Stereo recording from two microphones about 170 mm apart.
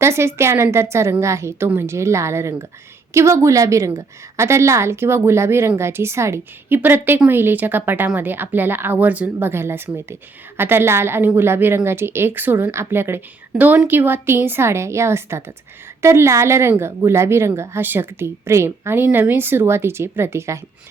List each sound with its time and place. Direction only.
0.0 s a woman's voice: 15° right (ahead or behind)